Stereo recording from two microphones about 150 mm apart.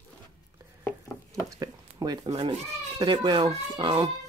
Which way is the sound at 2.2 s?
40° right (ahead or behind).